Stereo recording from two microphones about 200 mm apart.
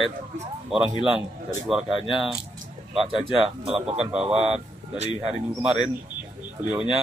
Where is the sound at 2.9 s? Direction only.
30° right (ahead or behind).